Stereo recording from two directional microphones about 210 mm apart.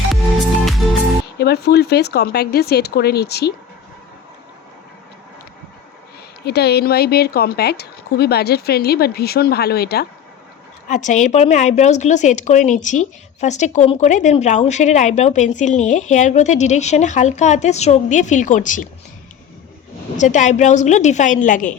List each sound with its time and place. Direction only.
1.4 s speech: 50° left (ahead or behind)
6.4 s speech: 50° left (ahead or behind)
10.8 s a woman's voice: 35° left (ahead or behind)
20.1 s a woman's voice: 35° left (ahead or behind)